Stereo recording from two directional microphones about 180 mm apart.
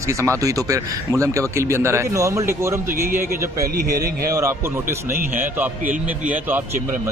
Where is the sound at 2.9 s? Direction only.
55° right (ahead or behind).